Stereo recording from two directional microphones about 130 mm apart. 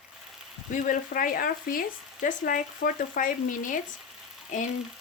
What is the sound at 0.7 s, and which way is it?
Speech, 90° left.